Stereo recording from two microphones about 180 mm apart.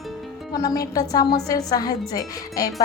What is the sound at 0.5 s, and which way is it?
A woman's voice, 20° left (ahead or behind).